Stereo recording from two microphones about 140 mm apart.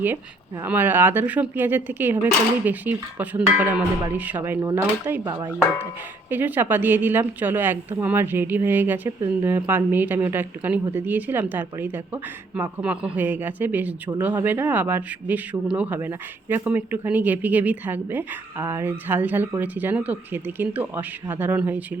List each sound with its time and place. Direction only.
0.6 s speech: 15° right (ahead or behind)
6.3 s speech: 15° right (ahead or behind)